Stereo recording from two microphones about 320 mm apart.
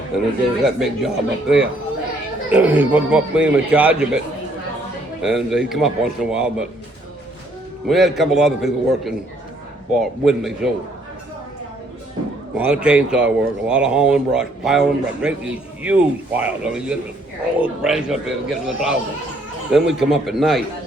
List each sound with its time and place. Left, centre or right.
0.6 s speech: centre
5.2 s speech: centre
7.9 s speech: centre
12.5 s speech: centre